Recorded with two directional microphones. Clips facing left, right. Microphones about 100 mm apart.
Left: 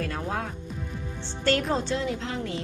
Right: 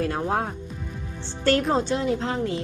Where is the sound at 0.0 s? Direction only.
30° right (ahead or behind).